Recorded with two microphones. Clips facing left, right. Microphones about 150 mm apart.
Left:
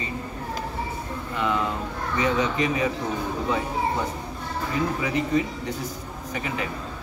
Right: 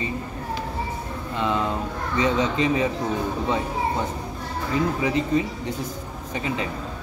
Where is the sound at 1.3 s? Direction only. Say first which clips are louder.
Right 1 dB; 25° right (ahead or behind).